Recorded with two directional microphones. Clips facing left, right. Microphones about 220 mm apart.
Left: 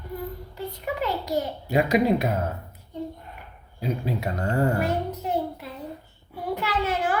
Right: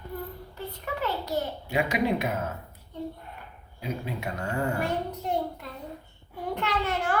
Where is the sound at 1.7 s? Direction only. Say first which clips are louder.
Left 6 dB; 40° left (ahead or behind).